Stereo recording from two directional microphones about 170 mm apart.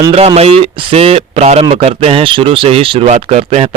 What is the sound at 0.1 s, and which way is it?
Speech, 35° right (ahead or behind).